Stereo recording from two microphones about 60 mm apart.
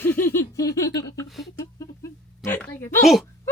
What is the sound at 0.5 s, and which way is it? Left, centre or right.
Speech, left.